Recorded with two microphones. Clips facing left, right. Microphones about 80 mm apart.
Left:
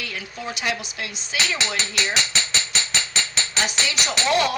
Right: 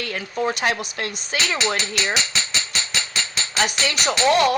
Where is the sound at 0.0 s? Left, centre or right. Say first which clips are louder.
Right 8 dB; right.